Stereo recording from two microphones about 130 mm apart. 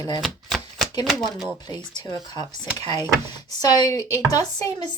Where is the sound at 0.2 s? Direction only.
Centre (ahead or behind).